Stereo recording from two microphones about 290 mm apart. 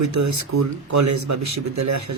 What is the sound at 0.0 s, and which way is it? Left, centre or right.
A man's voice, right.